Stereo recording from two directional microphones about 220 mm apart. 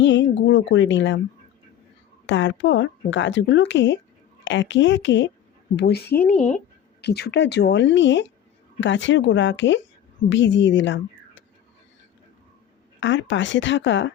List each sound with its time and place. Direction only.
0.0 s speech: 55° left (ahead or behind)
2.2 s speech: 55° left (ahead or behind)
13.0 s speech: 55° left (ahead or behind)